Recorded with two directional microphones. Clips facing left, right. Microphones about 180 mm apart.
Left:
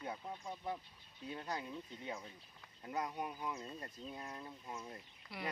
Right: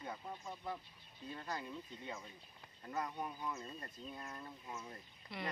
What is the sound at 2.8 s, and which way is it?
Speech, 15° left (ahead or behind).